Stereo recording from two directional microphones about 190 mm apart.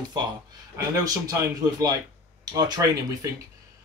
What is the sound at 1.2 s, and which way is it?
Speech, 20° right (ahead or behind).